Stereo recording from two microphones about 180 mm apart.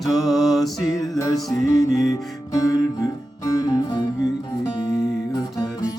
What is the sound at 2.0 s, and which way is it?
Music, 20° left (ahead or behind).